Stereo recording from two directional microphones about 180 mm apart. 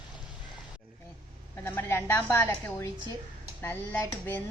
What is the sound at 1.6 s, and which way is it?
A woman's voice, 15° left (ahead or behind).